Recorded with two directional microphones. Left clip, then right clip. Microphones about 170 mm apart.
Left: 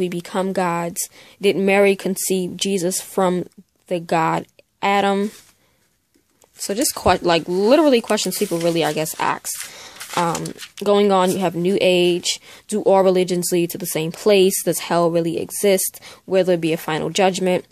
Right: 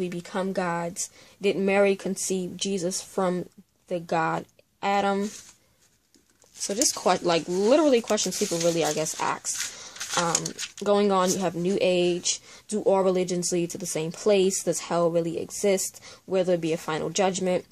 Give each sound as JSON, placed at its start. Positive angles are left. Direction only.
{"t": 0.0, "sound": "speech", "side_deg": 50}
{"t": 6.6, "sound": "speech", "side_deg": 40}